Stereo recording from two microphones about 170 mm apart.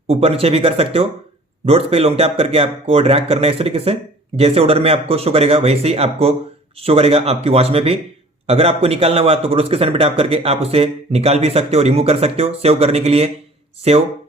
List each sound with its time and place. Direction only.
0.1 s a man's voice: 35° right (ahead or behind)